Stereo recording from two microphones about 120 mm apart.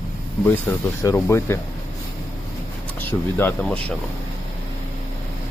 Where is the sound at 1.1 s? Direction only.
20° left (ahead or behind).